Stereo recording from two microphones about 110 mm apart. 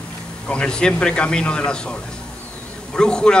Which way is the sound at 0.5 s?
10° left (ahead or behind).